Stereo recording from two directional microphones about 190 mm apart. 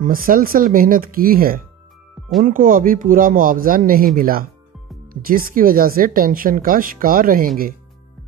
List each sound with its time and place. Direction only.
0.0 s speech: 45° right (ahead or behind)